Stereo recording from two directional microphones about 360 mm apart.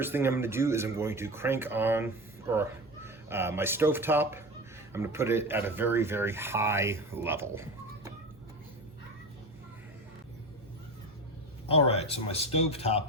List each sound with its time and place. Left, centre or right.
0.0 s a man's voice: centre
11.7 s speech: centre